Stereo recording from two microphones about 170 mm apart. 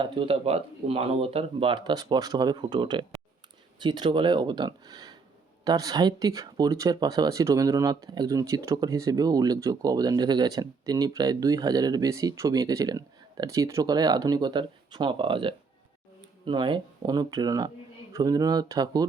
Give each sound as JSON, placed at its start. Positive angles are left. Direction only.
{"t": 0.0, "sound": "speech", "side_deg": -30}